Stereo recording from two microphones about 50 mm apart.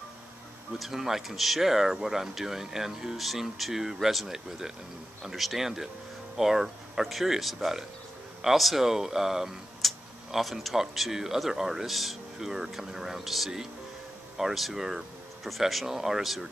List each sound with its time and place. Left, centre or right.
0.7 s speech: centre